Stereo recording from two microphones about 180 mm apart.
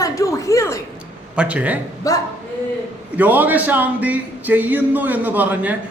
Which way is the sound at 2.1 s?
20° left (ahead or behind).